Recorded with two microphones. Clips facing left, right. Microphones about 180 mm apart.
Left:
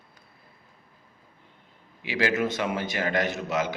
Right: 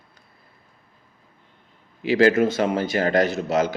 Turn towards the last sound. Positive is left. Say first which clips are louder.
# right 6 dB
turn(degrees=-35)  # may be behind; listen again after turning